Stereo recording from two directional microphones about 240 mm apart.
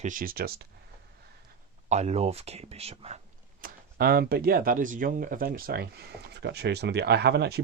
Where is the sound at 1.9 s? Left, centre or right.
Right.